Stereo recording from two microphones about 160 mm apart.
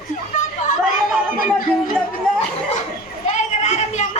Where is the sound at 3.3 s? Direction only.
45° left (ahead or behind).